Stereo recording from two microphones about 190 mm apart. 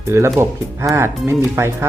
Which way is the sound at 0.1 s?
15° right (ahead or behind).